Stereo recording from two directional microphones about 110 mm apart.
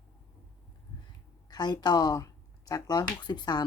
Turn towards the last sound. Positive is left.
turn(degrees=40)  # may be behind; listen again after turning